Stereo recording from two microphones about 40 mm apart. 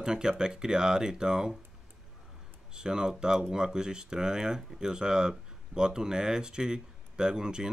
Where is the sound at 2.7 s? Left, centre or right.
Centre.